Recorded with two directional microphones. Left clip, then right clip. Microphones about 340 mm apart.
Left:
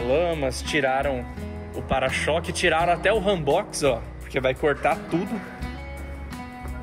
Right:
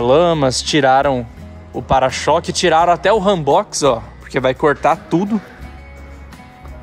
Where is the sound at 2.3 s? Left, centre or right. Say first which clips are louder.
Right 10 dB; right.